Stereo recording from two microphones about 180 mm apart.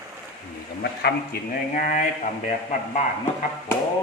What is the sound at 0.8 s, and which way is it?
Speech, 65° left (ahead or behind).